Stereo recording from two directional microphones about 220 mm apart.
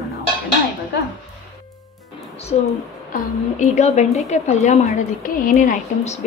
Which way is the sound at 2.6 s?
30° left (ahead or behind).